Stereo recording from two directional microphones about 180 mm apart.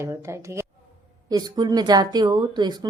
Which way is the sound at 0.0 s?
15° right (ahead or behind).